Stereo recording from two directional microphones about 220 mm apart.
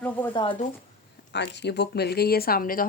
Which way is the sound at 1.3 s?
50° left (ahead or behind).